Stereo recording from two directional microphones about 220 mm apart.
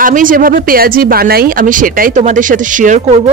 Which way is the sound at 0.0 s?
35° right (ahead or behind).